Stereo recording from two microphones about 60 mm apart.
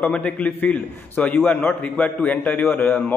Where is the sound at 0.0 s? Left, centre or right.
Centre.